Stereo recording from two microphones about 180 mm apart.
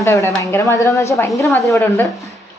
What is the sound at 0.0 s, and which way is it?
Speech, 15° left (ahead or behind).